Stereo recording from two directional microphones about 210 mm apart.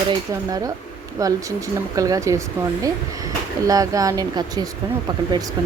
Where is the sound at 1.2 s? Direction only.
15° right (ahead or behind).